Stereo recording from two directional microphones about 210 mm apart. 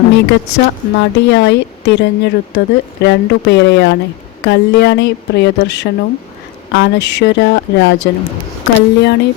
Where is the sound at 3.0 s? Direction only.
55° left (ahead or behind).